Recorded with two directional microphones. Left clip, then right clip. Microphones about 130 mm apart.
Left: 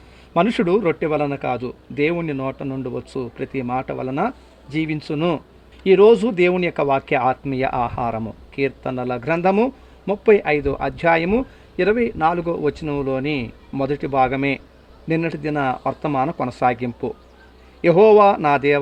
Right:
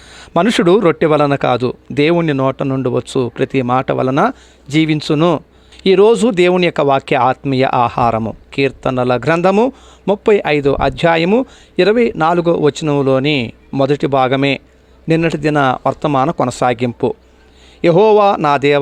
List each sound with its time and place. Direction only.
0.2 s a man's voice: 55° right (ahead or behind); by 18.8 s 35° right (ahead or behind)